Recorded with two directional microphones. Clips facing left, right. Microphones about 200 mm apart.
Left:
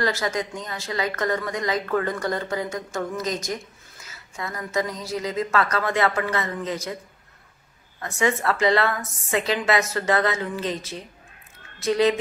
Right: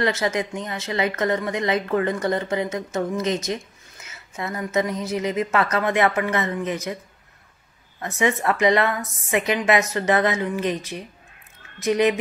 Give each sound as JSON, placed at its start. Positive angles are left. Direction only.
{"t": 0.0, "sound": "a woman's voice", "side_deg": -20}
{"t": 8.2, "sound": "a woman's voice", "side_deg": -15}